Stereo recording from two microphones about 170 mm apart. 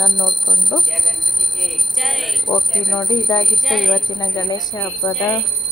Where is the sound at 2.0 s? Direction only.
Centre (ahead or behind).